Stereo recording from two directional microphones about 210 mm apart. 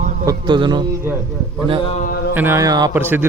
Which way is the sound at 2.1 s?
50° left (ahead or behind).